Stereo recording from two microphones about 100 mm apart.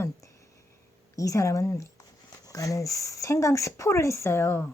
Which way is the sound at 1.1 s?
35° left (ahead or behind).